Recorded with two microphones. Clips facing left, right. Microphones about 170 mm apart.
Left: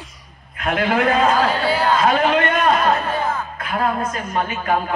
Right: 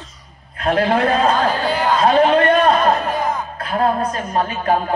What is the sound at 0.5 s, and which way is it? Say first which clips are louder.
Speech: right 3 dB; 35° right (ahead or behind).